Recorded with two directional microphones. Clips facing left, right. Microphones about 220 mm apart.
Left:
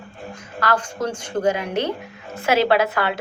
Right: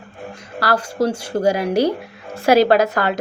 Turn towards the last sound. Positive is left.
turn(degrees=-40)  # may be behind; listen again after turning